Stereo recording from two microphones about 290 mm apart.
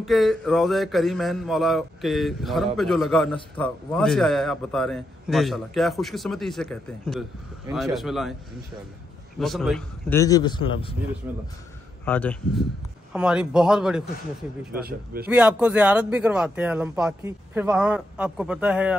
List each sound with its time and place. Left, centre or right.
0.0 s a man's voice: centre
9.4 s a man's voice: centre
12.0 s a man's voice: centre
14.7 s speech: right
15.2 s a man's voice: centre